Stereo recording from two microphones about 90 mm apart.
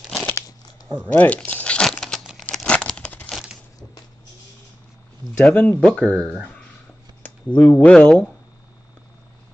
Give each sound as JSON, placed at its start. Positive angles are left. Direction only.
{"t": 1.0, "sound": "speech", "side_deg": 15}
{"t": 1.9, "sound": "crumpling", "side_deg": 5}
{"t": 3.3, "sound": "a sound", "side_deg": 0}
{"t": 5.4, "sound": "speech", "side_deg": 15}